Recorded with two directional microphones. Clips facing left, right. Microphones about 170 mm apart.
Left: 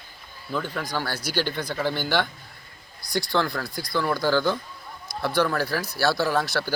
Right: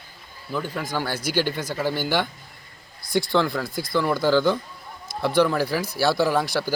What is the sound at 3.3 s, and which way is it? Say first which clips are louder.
Speech: right 1 dB; 20° right (ahead or behind).